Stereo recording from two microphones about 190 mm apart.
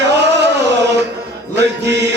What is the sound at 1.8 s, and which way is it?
Mantra, 65° right (ahead or behind).